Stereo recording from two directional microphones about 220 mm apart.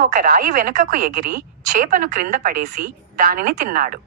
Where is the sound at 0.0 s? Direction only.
40° right (ahead or behind).